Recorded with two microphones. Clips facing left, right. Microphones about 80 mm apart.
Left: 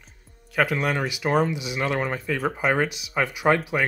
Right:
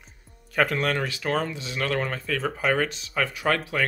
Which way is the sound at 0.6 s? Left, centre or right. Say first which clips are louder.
Left 1 dB; centre.